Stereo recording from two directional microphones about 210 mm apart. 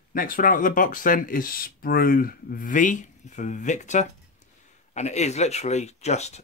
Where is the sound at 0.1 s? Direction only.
40° left (ahead or behind).